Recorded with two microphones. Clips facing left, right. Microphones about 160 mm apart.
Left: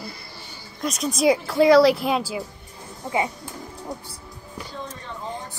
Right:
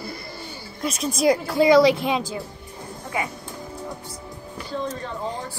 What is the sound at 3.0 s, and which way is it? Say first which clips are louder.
Speech: left 4 dB; 20° left (ahead or behind).